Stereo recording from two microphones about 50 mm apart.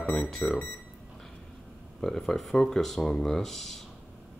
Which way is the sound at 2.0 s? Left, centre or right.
Centre.